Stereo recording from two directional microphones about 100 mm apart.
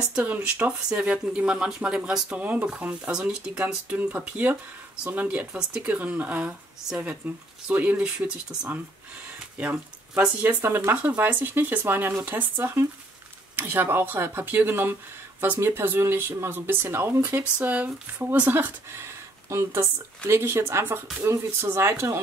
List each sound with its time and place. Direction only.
0.1 s speech: 15° right (ahead or behind)
17.4 s speech: 15° right (ahead or behind)